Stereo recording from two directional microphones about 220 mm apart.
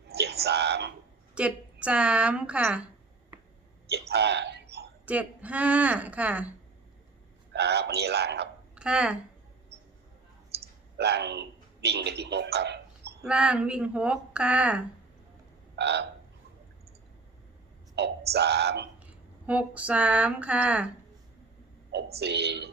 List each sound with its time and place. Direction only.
0.1 s a sound: 50° right (ahead or behind)
1.4 s speech: 5° right (ahead or behind)
4.1 s a sound: 50° right (ahead or behind)
5.0 s speech: 5° right (ahead or behind)
7.5 s a man's voice: 50° right (ahead or behind)
8.7 s a sound: 5° right (ahead or behind)
10.9 s a man's voice: 50° right (ahead or behind)
13.2 s speech: 5° right (ahead or behind)
15.7 s frog: 50° right (ahead or behind)
18.3 s a man's voice: 50° right (ahead or behind)
19.0 s speech: 5° right (ahead or behind)
22.2 s a man's voice: 50° right (ahead or behind)